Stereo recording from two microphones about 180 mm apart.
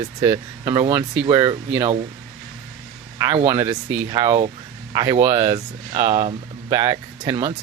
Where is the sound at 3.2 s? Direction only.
20° right (ahead or behind).